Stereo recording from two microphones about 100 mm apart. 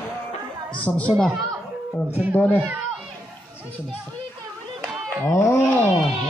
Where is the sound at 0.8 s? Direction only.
15° left (ahead or behind).